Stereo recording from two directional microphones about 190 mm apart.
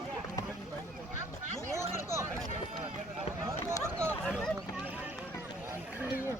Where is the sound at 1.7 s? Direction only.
15° right (ahead or behind).